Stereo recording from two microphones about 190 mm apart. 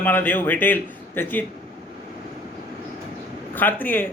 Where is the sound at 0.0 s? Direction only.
10° left (ahead or behind).